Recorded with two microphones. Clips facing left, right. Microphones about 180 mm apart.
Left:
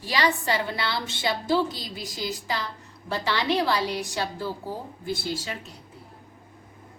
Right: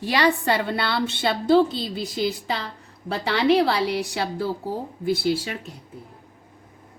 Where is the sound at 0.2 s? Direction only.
60° right (ahead or behind).